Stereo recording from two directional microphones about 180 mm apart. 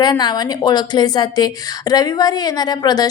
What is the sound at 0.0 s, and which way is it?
Speech, 25° left (ahead or behind).